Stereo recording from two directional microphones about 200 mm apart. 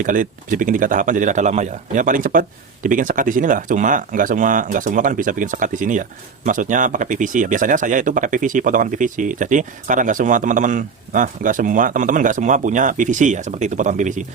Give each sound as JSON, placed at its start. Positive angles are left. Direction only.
{"t": 0.0, "sound": "speech", "side_deg": -40}